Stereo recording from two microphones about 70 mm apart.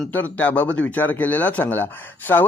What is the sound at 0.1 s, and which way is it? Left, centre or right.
Speech, left.